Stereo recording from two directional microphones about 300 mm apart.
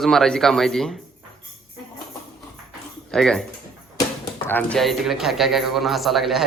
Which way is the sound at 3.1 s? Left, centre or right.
Centre.